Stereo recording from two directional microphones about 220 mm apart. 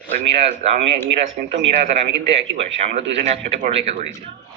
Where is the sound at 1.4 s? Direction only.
35° right (ahead or behind).